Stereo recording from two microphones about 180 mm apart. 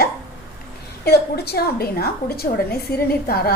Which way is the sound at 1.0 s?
65° left (ahead or behind).